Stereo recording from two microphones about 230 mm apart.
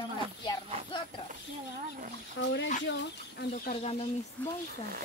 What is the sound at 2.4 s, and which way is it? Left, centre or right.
Speech, left.